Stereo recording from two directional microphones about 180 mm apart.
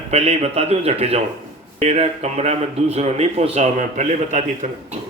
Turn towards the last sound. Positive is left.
turn(degrees=-40)  # may be behind; listen again after turning